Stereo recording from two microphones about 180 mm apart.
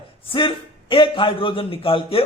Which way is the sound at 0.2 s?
30° left (ahead or behind).